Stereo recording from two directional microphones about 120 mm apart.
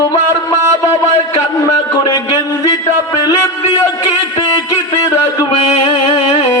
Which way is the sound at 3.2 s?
35° left (ahead or behind).